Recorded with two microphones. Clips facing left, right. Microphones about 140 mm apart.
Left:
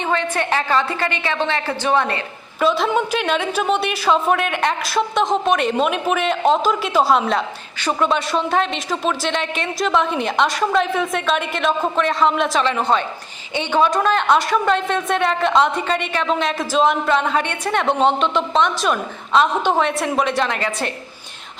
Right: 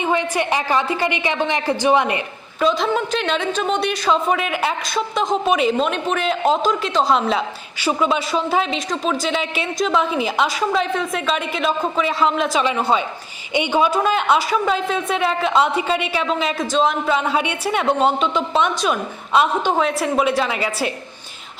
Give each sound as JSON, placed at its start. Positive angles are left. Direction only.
{"t": 0.0, "sound": "a woman's voice", "side_deg": -15}
{"t": 2.6, "sound": "a woman's voice", "side_deg": 0}